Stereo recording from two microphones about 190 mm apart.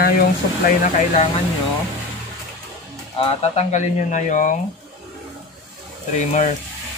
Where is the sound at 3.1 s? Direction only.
30° left (ahead or behind).